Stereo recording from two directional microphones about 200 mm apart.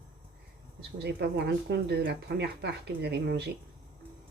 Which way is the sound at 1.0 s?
55° right (ahead or behind).